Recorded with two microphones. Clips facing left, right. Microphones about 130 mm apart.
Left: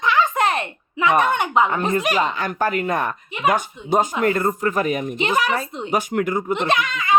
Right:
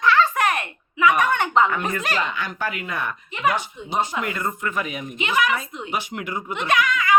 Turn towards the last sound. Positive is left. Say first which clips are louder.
# right 1 dB
turn(degrees=25)  # may be behind; listen again after turning